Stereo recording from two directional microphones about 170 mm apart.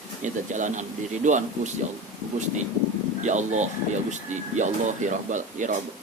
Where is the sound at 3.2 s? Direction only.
45° right (ahead or behind).